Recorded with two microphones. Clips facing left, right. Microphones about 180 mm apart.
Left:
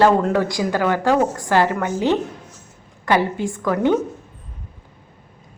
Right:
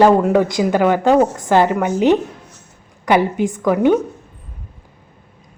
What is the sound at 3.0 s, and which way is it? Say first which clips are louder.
Speech: right 4 dB; 15° right (ahead or behind).